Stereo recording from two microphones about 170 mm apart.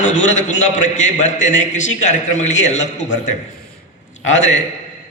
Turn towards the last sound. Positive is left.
turn(degrees=45)  # may be behind; listen again after turning